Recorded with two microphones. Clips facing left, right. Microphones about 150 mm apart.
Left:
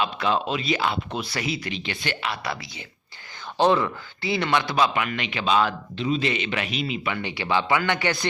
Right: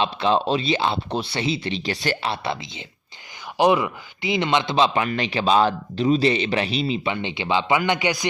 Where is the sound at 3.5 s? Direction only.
15° right (ahead or behind).